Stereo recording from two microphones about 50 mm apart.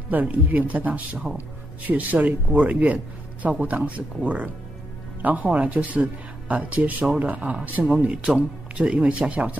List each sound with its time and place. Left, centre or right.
0.1 s speech: right